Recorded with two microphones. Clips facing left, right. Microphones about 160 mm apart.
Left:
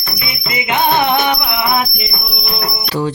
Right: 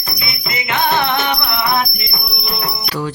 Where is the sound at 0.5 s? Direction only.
15° left (ahead or behind).